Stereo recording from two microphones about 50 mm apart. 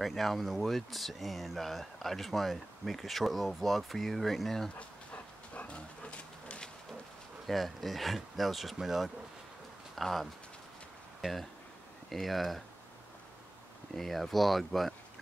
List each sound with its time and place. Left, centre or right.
0.0 s speech: centre
4.7 s dog: left
7.4 s speech: centre
13.9 s speech: centre